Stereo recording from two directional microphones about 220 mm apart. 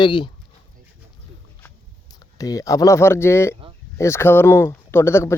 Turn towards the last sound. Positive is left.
turn(degrees=10)  # may be behind; listen again after turning